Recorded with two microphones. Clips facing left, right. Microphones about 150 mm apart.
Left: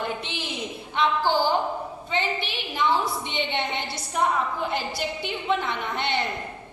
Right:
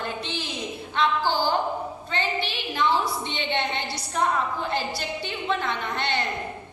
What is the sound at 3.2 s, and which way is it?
A woman's voice, 15° left (ahead or behind).